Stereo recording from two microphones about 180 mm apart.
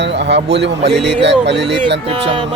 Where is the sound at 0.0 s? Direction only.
75° right (ahead or behind).